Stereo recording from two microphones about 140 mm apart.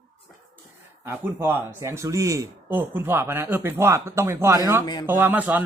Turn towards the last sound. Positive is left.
turn(degrees=-10)  # may be behind; listen again after turning